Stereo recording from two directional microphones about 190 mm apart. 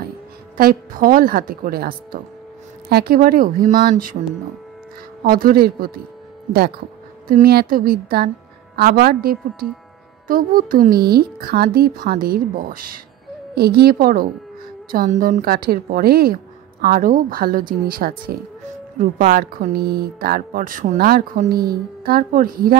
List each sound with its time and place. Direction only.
0.6 s speech: 50° right (ahead or behind)
5.2 s speech: 50° right (ahead or behind)
7.2 s speech: 50° right (ahead or behind)